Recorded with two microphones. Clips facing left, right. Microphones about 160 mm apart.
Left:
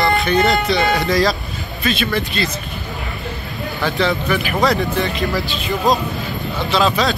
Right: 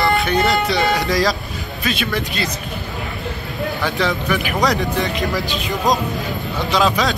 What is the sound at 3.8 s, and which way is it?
Speech, 10° right (ahead or behind).